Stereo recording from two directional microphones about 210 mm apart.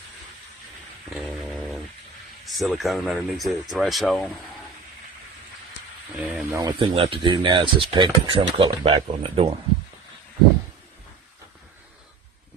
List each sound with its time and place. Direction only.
2.6 s speech: centre (ahead or behind)
6.1 s speech: 5° right (ahead or behind)
6.6 s speech: 20° right (ahead or behind)